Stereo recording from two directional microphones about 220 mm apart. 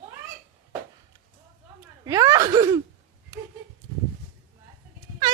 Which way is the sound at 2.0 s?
15° right (ahead or behind).